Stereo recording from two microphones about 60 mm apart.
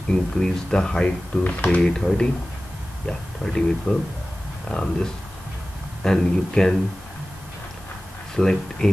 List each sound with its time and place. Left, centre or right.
0.1 s speech: centre
1.0 s speech: left
1.8 s speech: centre
8.4 s speech: centre